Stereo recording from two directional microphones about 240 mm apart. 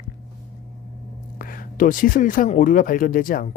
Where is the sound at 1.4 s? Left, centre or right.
Left.